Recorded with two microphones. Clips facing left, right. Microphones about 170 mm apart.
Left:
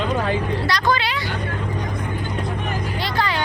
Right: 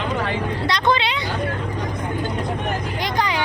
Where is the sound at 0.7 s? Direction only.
20° right (ahead or behind).